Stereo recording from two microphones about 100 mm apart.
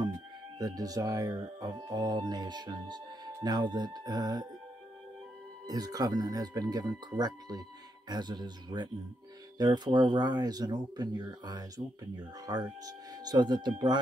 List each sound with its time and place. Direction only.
0.6 s speech: 40° right (ahead or behind)
5.7 s speech: 40° right (ahead or behind)